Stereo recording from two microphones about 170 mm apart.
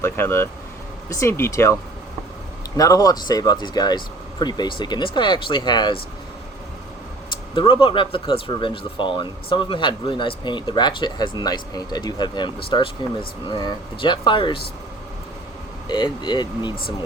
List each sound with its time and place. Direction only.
0.0 s speech: 15° left (ahead or behind)
2.7 s speech: 20° left (ahead or behind)
7.5 s speech: 30° left (ahead or behind)
15.9 s speech: 25° left (ahead or behind)